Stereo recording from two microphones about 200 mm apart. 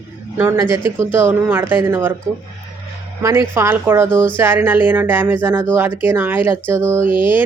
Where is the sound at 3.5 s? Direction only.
10° right (ahead or behind).